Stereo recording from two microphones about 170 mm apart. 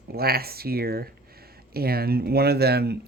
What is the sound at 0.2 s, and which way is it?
Speech, 65° right (ahead or behind).